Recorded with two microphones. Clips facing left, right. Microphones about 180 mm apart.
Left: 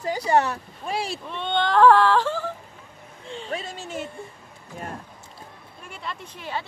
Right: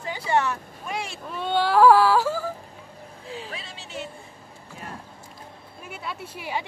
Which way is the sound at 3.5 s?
45° left (ahead or behind).